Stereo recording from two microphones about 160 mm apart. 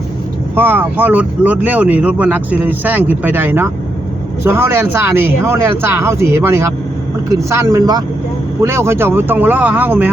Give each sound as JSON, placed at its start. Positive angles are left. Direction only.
{"t": 0.5, "sound": "speech", "side_deg": -15}